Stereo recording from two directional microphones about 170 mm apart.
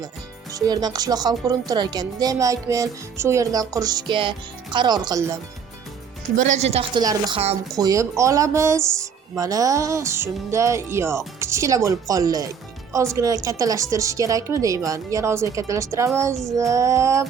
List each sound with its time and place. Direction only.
0.5 s speech: 25° right (ahead or behind)
6.3 s a woman's voice: 45° right (ahead or behind)
7.0 s speech: 20° right (ahead or behind)